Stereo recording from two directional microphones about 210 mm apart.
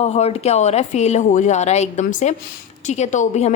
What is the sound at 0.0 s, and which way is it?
A woman's voice, 30° left (ahead or behind).